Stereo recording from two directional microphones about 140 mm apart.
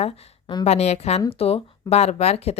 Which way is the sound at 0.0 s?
35° left (ahead or behind).